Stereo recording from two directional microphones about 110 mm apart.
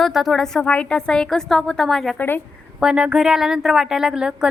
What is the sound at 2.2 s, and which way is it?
Speech, 20° left (ahead or behind).